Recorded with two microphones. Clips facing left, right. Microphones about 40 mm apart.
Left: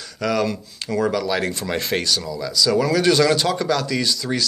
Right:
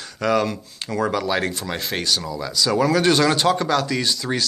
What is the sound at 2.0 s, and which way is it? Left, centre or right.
Speech, centre.